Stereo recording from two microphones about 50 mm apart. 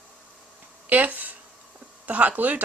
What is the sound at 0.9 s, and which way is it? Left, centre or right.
A woman's voice, right.